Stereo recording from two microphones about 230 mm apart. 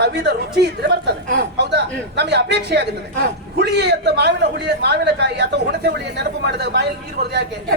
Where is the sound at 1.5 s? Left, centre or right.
Right.